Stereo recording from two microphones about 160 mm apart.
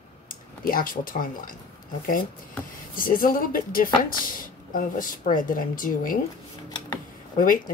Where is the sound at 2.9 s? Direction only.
60° left (ahead or behind).